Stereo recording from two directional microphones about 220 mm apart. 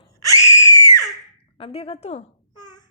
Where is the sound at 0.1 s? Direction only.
15° left (ahead or behind).